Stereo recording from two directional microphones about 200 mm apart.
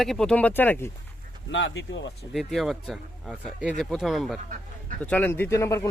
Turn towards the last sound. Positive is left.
turn(degrees=15)  # may be behind; listen again after turning